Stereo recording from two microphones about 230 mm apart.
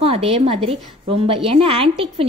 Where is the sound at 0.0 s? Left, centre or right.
Right.